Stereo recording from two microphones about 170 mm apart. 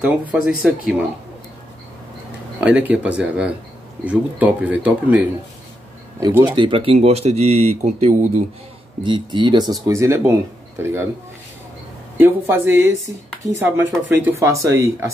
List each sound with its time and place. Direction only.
0.0 s speech: 5° right (ahead or behind)
2.6 s speech: 10° right (ahead or behind)
6.1 s speech: 20° right (ahead or behind); by 8.3 s 45° right (ahead or behind)
9.0 s speech: 25° right (ahead or behind)
12.2 s speech: 15° right (ahead or behind)